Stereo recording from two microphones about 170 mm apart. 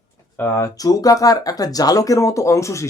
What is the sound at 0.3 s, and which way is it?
Speech, 15° left (ahead or behind).